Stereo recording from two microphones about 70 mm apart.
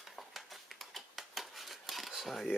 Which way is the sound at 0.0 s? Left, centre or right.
Centre.